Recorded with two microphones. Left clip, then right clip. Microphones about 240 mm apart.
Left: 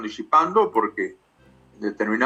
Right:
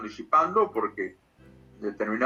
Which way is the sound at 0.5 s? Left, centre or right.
Left.